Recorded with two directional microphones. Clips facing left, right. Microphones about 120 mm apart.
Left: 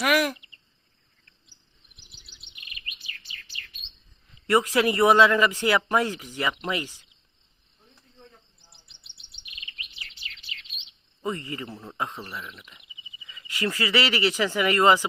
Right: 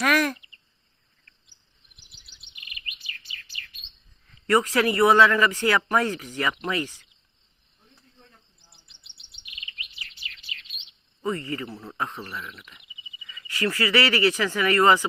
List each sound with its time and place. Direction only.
0.0 s speech: 10° left (ahead or behind)
4.4 s speech: 15° left (ahead or behind)
11.2 s speech: 15° left (ahead or behind)